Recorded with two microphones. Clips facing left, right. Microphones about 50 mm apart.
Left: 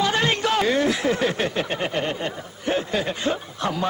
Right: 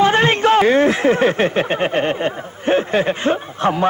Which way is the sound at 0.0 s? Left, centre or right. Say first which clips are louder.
Right 8 dB; right.